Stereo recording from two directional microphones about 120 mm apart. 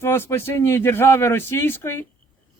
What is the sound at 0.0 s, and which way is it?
A man's voice, 20° left (ahead or behind).